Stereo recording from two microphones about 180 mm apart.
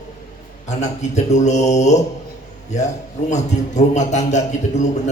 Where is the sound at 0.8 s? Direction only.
40° left (ahead or behind).